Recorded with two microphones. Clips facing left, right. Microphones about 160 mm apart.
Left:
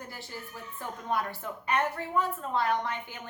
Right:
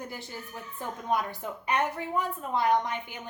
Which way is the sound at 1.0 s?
15° right (ahead or behind).